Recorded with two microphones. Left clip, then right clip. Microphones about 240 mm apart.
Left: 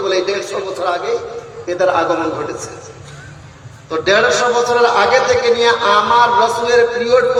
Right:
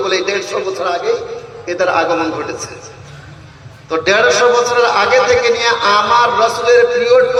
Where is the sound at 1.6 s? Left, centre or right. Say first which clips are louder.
Even; right.